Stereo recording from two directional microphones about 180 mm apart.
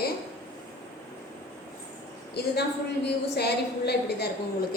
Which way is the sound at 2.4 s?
65° left (ahead or behind).